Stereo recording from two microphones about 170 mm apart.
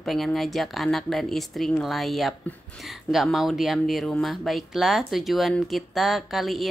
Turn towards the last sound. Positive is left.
turn(degrees=0)  # may be behind; listen again after turning